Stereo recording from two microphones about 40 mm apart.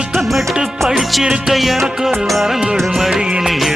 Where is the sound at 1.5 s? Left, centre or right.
Centre.